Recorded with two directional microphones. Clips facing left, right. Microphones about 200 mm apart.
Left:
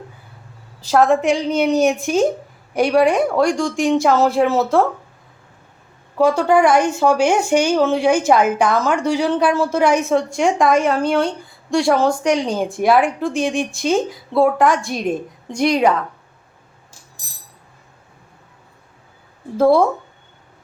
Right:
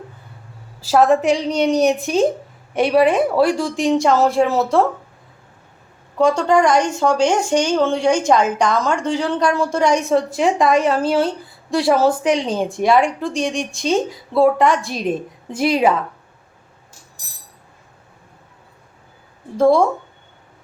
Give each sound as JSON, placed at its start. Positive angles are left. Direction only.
{"t": 0.8, "sound": "speech", "side_deg": -5}
{"t": 6.1, "sound": "speech", "side_deg": 5}
{"t": 19.5, "sound": "speech", "side_deg": 5}